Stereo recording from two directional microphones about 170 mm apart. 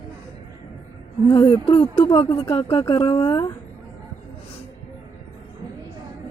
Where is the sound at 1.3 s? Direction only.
30° left (ahead or behind).